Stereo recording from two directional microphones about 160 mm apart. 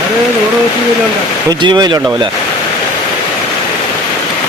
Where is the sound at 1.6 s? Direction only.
25° right (ahead or behind).